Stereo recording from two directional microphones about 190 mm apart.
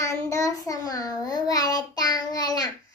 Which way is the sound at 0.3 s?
15° left (ahead or behind).